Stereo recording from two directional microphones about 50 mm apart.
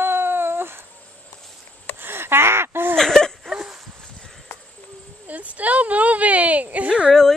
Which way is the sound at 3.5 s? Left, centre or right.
Centre.